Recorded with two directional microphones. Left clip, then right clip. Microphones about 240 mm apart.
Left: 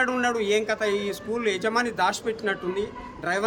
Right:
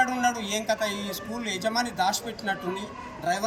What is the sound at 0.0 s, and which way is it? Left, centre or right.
A man's voice, left.